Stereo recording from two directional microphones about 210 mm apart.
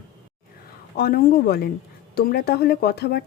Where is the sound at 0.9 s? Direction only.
45° left (ahead or behind).